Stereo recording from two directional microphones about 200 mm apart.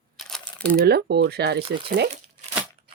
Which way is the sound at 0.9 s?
55° right (ahead or behind).